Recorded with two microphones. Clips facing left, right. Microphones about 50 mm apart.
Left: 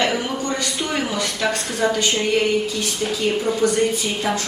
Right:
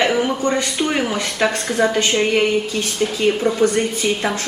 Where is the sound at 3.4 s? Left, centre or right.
Right.